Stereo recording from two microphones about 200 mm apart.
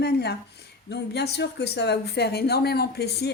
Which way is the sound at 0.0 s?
55° left (ahead or behind).